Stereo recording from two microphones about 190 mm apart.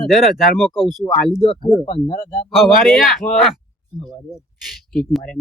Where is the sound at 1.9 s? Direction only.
30° left (ahead or behind).